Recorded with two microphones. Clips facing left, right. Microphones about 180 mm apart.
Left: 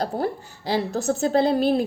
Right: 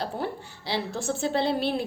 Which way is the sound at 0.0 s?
45° left (ahead or behind).